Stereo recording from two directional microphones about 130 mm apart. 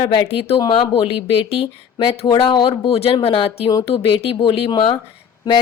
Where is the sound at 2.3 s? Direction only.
40° left (ahead or behind).